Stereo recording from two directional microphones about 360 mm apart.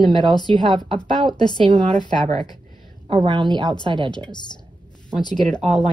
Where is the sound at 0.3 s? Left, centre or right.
Centre.